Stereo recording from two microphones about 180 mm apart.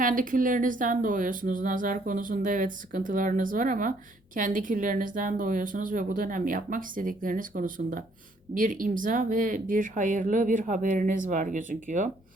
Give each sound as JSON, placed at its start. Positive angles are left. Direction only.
{"t": 0.0, "sound": "speech", "side_deg": -50}